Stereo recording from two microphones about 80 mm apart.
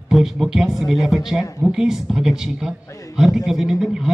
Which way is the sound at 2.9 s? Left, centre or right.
Left.